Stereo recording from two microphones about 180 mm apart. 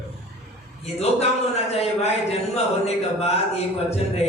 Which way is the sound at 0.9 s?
35° left (ahead or behind).